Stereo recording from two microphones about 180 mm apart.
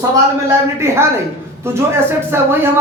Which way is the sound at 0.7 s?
15° right (ahead or behind).